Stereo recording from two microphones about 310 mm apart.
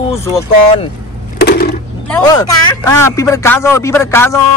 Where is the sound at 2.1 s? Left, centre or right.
Centre.